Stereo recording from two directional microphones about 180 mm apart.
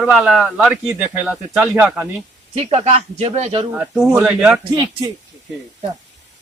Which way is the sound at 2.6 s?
35° right (ahead or behind).